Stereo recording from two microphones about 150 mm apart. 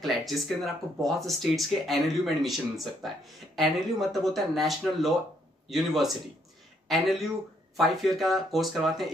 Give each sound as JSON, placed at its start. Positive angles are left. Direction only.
{"t": 0.0, "sound": "speech", "side_deg": 0}